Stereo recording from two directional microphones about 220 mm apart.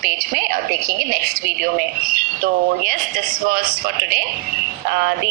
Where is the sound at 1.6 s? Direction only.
40° right (ahead or behind).